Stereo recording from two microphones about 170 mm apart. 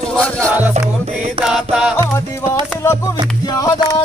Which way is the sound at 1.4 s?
5° right (ahead or behind).